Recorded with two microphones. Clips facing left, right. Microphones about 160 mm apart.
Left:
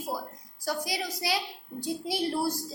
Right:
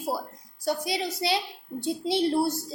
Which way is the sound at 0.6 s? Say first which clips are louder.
Right 4 dB; 25° right (ahead or behind).